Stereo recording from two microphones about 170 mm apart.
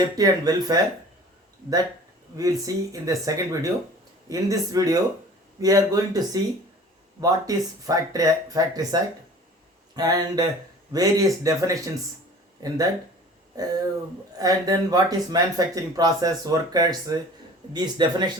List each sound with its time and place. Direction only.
0.0 s speech: 20° right (ahead or behind)
2.3 s speech: 20° right (ahead or behind)
14.3 s speech: 20° right (ahead or behind)